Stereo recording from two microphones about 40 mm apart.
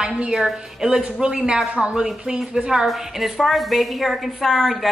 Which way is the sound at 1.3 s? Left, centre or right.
Centre.